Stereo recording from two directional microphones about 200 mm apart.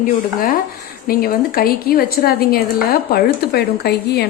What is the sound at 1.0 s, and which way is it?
A woman's voice, 45° left (ahead or behind).